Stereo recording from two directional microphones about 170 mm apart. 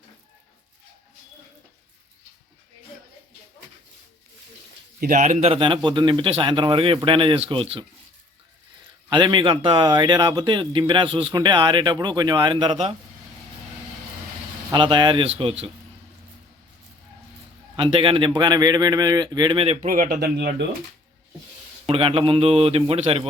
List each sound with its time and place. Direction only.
4.9 s a man's voice: 50° right (ahead or behind); by 7.9 s 30° right (ahead or behind)
9.0 s speech: 25° right (ahead or behind)
14.7 s speech: 25° right (ahead or behind)
17.7 s speech: 30° right (ahead or behind)
19.9 s speech: 60° right (ahead or behind); by 20.7 s 75° right (ahead or behind)
21.8 s a man's voice: 35° right (ahead or behind)